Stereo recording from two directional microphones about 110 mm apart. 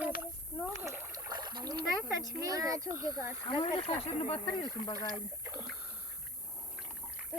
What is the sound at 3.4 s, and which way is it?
Speech, 50° left (ahead or behind).